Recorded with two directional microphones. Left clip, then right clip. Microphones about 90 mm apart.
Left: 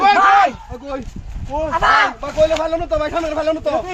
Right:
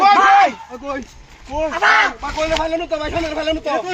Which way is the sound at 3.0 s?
30° left (ahead or behind).